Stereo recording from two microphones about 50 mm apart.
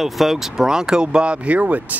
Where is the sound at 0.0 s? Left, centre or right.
Centre.